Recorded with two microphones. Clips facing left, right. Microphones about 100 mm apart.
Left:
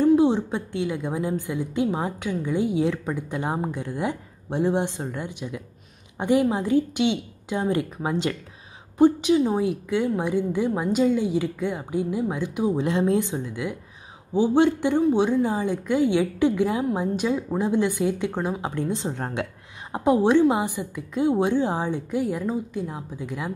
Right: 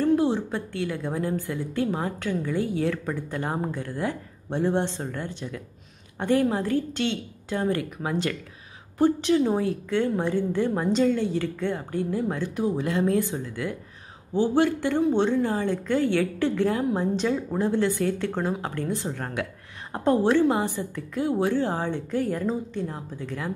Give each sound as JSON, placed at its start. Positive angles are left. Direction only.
{"t": 0.0, "sound": "a woman's voice", "side_deg": 20}
{"t": 15.0, "sound": "speech", "side_deg": 0}
{"t": 15.2, "sound": "a woman's voice", "side_deg": 10}
{"t": 19.9, "sound": "a woman's voice", "side_deg": 10}